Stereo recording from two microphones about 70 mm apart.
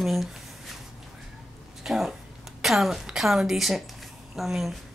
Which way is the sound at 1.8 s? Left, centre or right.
Centre.